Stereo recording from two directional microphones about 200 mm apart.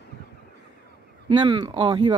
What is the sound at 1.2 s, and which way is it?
Speech, 20° right (ahead or behind).